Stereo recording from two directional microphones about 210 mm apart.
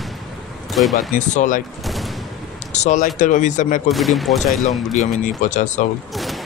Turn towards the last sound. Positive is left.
turn(degrees=0)  # may be behind; listen again after turning